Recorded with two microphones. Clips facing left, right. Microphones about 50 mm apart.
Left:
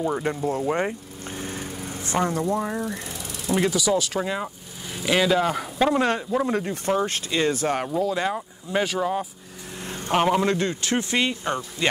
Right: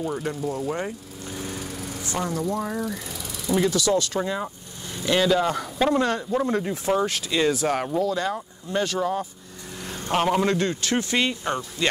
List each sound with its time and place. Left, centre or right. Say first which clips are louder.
0.0 s speech: left 3 dB; left
2.5 s speech: left 2 dB; centre
3.7 s speech: even; centre
6.5 s speech: even; centre
7.2 s speech: right 1 dB; centre
9.8 s a sound: left 1 dB; left
10.1 s speech: left 1 dB; centre